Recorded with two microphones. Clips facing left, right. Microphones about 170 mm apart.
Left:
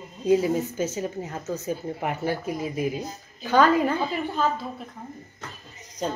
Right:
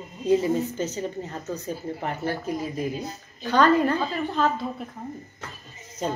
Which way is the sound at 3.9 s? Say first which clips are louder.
Even; 15° left (ahead or behind).